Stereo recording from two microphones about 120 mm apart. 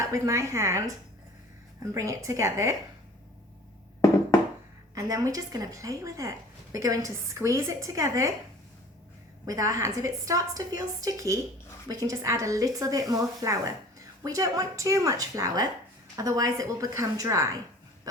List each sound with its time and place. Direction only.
0.0 s a woman's voice: 25° right (ahead or behind)
4.9 s a woman's voice: 30° right (ahead or behind)
9.5 s a woman's voice: 30° right (ahead or behind)